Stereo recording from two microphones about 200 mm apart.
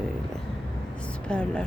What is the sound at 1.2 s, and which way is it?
Speech, 5° left (ahead or behind).